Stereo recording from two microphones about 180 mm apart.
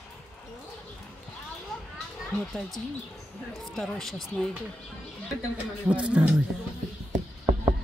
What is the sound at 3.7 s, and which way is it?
Speech, centre (ahead or behind).